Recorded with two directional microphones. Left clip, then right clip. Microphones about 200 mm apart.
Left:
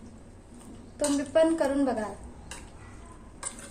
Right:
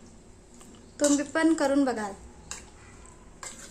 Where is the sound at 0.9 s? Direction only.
45° right (ahead or behind).